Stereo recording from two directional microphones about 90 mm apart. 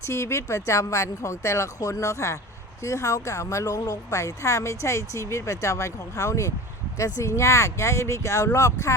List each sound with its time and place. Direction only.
0.0 s speech: 30° left (ahead or behind)